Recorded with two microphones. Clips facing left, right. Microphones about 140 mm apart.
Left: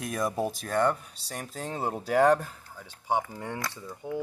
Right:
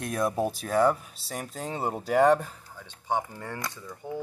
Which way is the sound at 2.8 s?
10° left (ahead or behind).